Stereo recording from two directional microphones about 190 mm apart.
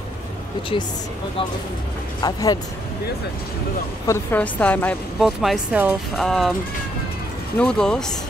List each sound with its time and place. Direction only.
2.2 s speech: 20° left (ahead or behind)
4.1 s a woman's voice: 10° left (ahead or behind)
7.5 s speech: 5° left (ahead or behind)